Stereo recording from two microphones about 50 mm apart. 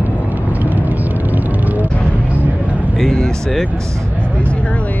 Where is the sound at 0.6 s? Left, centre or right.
Right.